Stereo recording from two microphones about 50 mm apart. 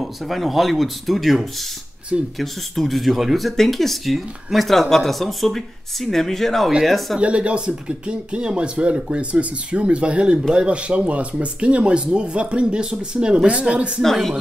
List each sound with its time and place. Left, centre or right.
0.0 s speech: centre
7.2 s speech: right
14.0 s speech: centre